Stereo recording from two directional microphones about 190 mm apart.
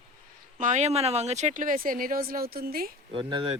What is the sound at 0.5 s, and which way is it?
Speech, 40° right (ahead or behind).